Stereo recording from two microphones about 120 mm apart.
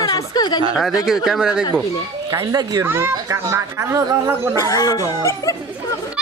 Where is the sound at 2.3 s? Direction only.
20° right (ahead or behind).